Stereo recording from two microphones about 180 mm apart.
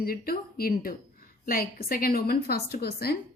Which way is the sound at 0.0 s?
55° left (ahead or behind).